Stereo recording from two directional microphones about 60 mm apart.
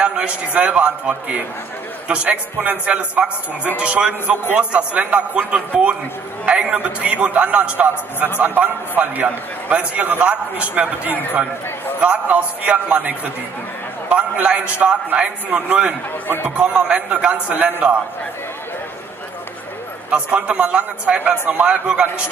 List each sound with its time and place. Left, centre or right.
0.0 s a man's voice: centre
20.1 s a man's voice: right